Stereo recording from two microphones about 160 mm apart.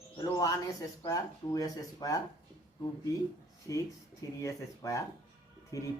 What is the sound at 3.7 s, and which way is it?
Speech, 20° left (ahead or behind).